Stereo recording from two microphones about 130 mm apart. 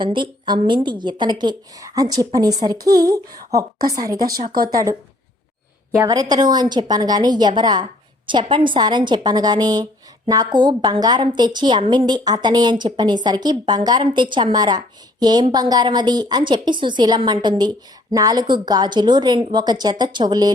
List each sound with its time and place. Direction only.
0.0 s a woman's voice: 40° right (ahead or behind)